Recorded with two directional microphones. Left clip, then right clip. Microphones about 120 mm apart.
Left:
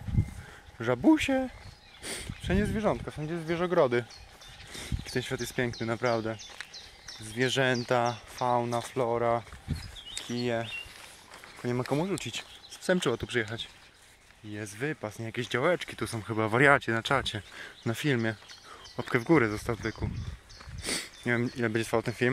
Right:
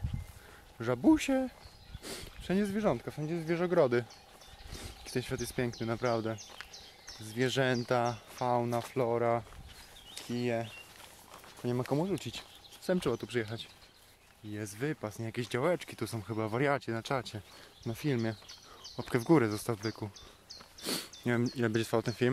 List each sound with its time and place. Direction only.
0.7 s speech: 10° left (ahead or behind)
1.1 s speech: centre (ahead or behind)
4.7 s speech: 10° left (ahead or behind); by 9.4 s 10° right (ahead or behind)
10.1 s speech: 5° left (ahead or behind)
11.9 s speech: centre (ahead or behind)
12.8 s speech: 10° left (ahead or behind)
13.1 s speech: centre (ahead or behind)
14.5 s speech: 10° right (ahead or behind)
16.3 s speech: 20° left (ahead or behind)
19.1 s speech: 10° right (ahead or behind)
20.8 s a sound: 35° right (ahead or behind)
21.2 s speech: 20° right (ahead or behind)